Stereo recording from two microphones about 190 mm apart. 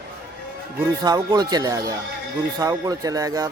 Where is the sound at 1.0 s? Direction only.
20° right (ahead or behind).